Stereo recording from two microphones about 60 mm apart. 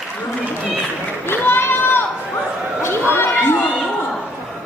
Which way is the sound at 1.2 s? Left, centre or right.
Left.